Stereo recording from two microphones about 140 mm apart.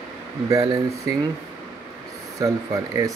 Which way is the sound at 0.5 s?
25° right (ahead or behind).